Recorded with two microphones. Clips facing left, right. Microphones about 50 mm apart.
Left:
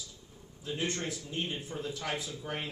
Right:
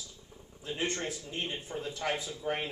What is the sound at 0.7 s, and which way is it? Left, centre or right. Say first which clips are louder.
Speech: even; right.